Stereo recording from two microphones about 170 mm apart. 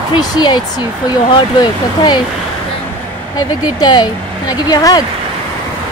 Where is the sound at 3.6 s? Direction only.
25° left (ahead or behind).